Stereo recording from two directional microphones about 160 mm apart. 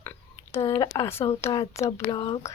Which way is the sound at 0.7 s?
20° left (ahead or behind).